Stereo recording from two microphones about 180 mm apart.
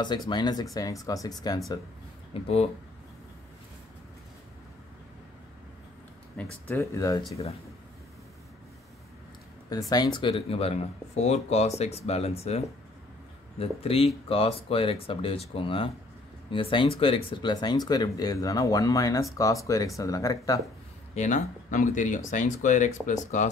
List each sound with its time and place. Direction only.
0.3 s speech: 25° left (ahead or behind)
2.4 s speech: 35° left (ahead or behind)
6.4 s speech: 5° left (ahead or behind)
9.7 s speech: 20° left (ahead or behind)
21.1 s speech: 40° left (ahead or behind)